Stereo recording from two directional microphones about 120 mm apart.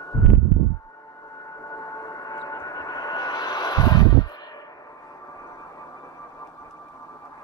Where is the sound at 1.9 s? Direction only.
30° left (ahead or behind).